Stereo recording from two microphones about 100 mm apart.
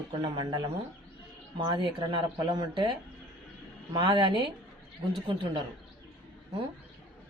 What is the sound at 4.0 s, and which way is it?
Speech, 50° right (ahead or behind).